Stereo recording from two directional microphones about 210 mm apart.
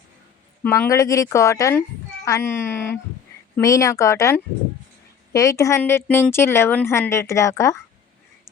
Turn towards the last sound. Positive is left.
turn(degrees=15)  # may be behind; listen again after turning